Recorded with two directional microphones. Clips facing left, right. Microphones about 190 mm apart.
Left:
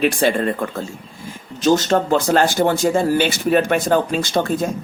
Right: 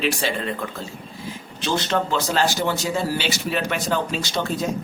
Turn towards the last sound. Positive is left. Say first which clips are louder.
# left 6 dB
turn(degrees=50)  # may be behind; listen again after turning